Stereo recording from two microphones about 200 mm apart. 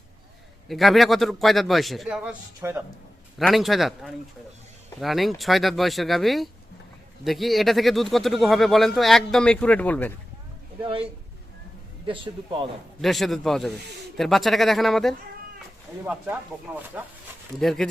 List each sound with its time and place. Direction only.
0.7 s speech: centre (ahead or behind)
2.6 s speech: 15° right (ahead or behind)
3.3 s speech: centre (ahead or behind)
10.8 s speech: 25° right (ahead or behind)
13.0 s speech: centre (ahead or behind)